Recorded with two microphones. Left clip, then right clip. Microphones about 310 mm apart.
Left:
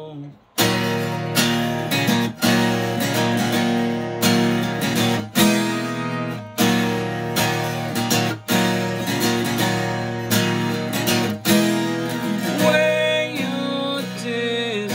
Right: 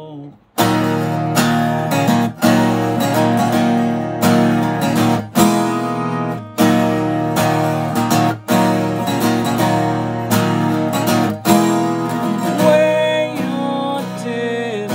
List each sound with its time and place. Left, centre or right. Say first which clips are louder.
0.6 s music: right 4 dB; centre
6.6 s music: right 6 dB; centre
11.1 s music: right 5 dB; centre